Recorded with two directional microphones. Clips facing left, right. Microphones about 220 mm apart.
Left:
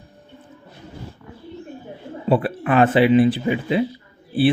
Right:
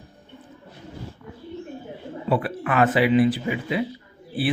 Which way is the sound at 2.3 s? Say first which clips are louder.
Left 5 dB; 30° left (ahead or behind).